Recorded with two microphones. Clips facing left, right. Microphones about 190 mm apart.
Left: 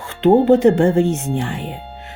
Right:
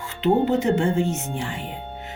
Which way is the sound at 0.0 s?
55° left (ahead or behind).